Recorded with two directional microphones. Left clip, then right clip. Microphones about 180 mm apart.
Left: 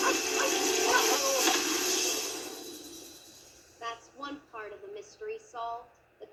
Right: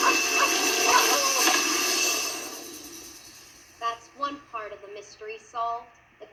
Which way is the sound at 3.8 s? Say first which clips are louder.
Right 9 dB; 30° right (ahead or behind).